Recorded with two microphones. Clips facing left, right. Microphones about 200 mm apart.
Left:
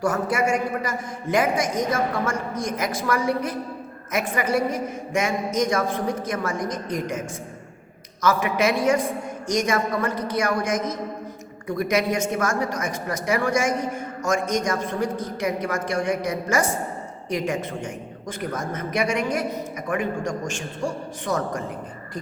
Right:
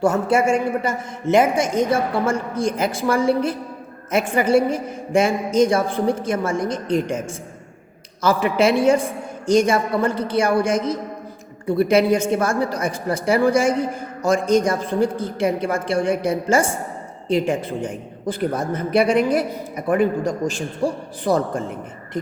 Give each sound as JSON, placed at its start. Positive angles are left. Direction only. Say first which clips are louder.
{"t": 0.0, "sound": "a man's voice", "louder": "right 5 dB", "side_deg": -25}
{"t": 8.2, "sound": "a woman's voice", "louder": "right 4 dB", "side_deg": -30}